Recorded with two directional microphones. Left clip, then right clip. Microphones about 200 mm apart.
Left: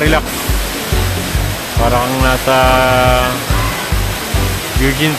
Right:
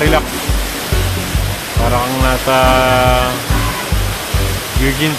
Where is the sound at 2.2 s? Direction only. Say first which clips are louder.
Even; 10° left (ahead or behind).